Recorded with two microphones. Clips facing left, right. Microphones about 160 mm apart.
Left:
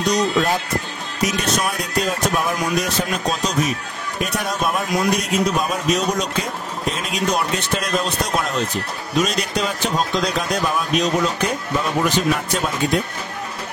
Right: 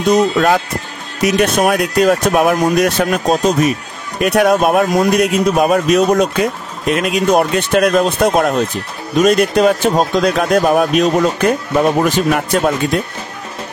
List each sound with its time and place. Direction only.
1.2 s speech: 55° right (ahead or behind)
4.2 s speech: 65° right (ahead or behind)